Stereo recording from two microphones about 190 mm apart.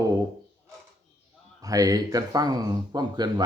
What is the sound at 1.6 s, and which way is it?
Speech, 20° right (ahead or behind).